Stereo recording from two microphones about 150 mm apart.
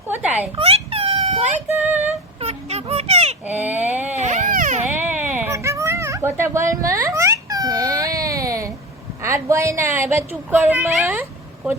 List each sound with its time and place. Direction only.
0.1 s a woman's voice: 10° right (ahead or behind)
0.5 s a sound: 40° right (ahead or behind)
1.8 s a woman's voice: 10° right (ahead or behind)
2.4 s children playing: 45° right (ahead or behind)
3.4 s baby cry: 10° right (ahead or behind)
4.1 s baby cry: 50° right (ahead or behind)
4.9 s baby cry: 10° right (ahead or behind)
9.2 s a woman's voice: 20° right (ahead or behind)